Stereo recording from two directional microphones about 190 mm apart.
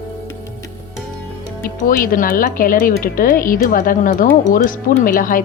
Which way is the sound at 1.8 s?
45° left (ahead or behind).